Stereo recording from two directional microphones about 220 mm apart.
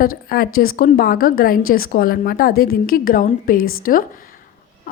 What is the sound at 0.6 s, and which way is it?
A woman's voice, 40° left (ahead or behind).